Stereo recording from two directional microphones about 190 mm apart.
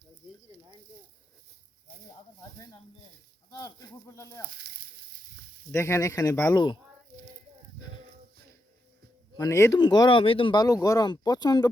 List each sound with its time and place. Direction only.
3.5 s speech: 20° left (ahead or behind)
5.7 s speech: 15° left (ahead or behind)
9.3 s speech: 20° left (ahead or behind)